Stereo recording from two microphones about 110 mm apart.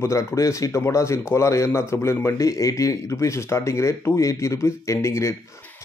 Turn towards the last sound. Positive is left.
turn(degrees=25)  # may be behind; listen again after turning